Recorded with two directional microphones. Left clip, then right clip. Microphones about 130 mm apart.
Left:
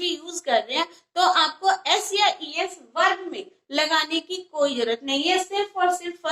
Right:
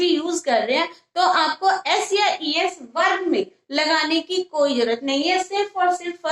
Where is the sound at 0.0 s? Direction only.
30° right (ahead or behind).